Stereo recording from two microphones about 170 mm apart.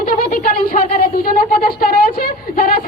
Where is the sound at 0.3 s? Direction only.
60° left (ahead or behind).